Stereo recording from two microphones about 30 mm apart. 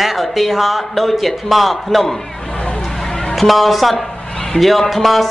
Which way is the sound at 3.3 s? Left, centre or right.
Centre.